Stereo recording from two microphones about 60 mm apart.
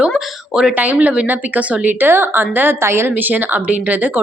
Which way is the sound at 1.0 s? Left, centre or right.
Right.